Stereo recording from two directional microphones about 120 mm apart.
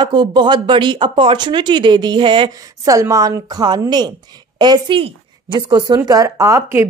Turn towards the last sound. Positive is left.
turn(degrees=-25)  # may be behind; listen again after turning